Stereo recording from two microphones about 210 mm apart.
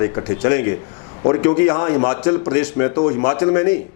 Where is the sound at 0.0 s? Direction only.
20° left (ahead or behind).